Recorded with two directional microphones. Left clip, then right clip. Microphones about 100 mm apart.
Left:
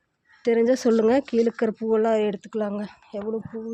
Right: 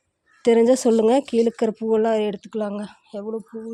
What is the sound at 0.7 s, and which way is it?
Speech, 30° right (ahead or behind).